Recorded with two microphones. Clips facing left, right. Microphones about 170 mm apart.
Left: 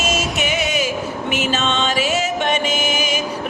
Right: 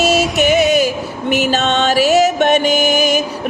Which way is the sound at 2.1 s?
40° right (ahead or behind).